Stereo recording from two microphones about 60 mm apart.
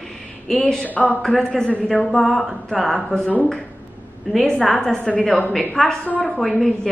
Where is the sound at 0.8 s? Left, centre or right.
Left.